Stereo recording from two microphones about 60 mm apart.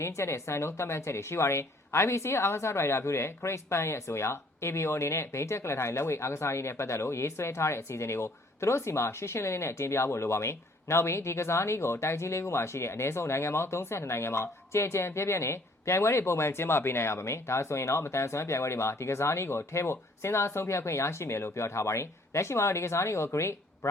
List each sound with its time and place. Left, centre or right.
0.0 s a woman's voice: left